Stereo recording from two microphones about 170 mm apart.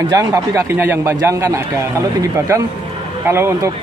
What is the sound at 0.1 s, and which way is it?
A man's voice, 20° right (ahead or behind).